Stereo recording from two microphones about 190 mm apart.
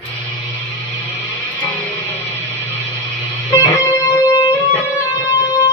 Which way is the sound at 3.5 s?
15° left (ahead or behind).